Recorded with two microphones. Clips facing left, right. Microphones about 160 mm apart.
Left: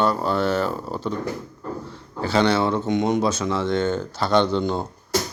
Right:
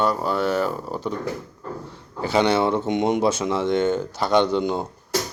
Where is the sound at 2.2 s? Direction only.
15° right (ahead or behind).